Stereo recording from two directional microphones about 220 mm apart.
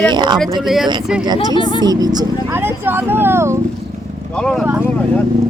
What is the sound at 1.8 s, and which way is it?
Speech, 20° right (ahead or behind).